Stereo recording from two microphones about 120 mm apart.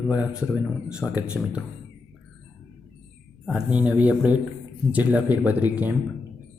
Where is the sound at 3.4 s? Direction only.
10° right (ahead or behind).